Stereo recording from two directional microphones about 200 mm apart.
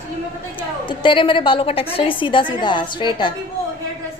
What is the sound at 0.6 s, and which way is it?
A woman's voice, 25° left (ahead or behind).